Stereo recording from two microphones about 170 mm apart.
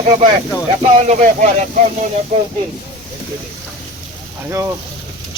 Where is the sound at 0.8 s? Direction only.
40° right (ahead or behind).